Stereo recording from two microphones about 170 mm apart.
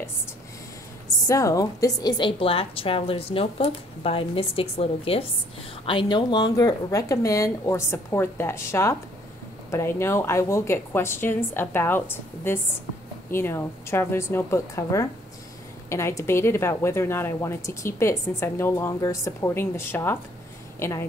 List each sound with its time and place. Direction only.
1.2 s a woman's voice: 20° left (ahead or behind)